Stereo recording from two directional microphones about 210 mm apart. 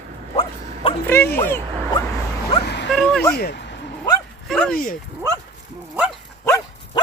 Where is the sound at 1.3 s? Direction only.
10° left (ahead or behind).